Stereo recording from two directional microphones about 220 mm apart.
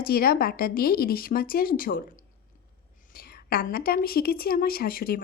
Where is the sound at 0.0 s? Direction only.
45° left (ahead or behind).